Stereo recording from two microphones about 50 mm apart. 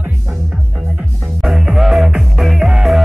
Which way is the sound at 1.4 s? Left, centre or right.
Centre.